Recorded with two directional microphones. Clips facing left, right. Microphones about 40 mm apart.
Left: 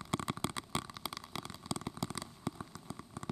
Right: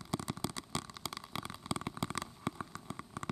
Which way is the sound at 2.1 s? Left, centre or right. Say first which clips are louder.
Right 3 dB; right.